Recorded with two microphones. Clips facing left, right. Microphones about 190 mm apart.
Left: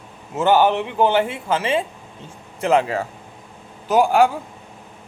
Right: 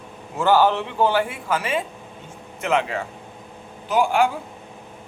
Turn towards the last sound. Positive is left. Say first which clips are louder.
# left 4 dB
turn(degrees=40)  # may be behind; listen again after turning